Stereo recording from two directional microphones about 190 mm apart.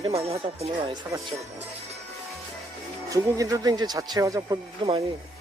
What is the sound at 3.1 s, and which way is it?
Speech, 15° right (ahead or behind).